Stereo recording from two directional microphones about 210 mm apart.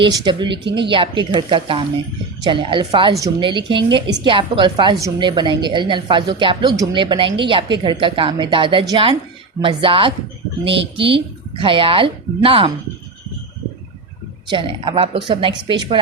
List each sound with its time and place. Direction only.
0.0 s a woman's voice: 20° right (ahead or behind)
14.4 s a woman's voice: 25° right (ahead or behind)